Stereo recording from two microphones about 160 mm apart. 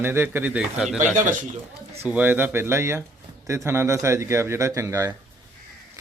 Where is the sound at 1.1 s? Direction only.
55° right (ahead or behind).